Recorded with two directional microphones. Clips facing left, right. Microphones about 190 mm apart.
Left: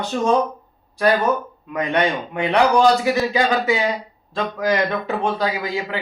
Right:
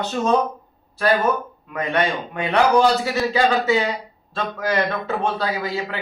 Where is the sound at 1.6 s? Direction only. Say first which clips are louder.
Left 2 dB; 15° left (ahead or behind).